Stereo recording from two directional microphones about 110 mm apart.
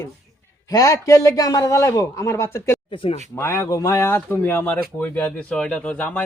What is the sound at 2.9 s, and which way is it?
Speech, 50° left (ahead or behind).